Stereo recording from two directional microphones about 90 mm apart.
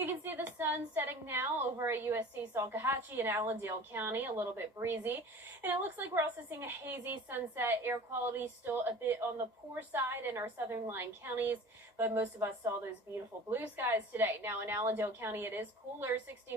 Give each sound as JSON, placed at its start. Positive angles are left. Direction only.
{"t": 0.0, "sound": "a woman's voice", "side_deg": -25}